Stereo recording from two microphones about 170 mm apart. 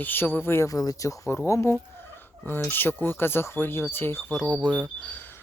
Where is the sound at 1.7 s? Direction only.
10° left (ahead or behind).